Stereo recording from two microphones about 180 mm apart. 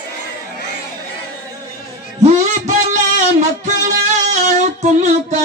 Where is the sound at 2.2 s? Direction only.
40° right (ahead or behind).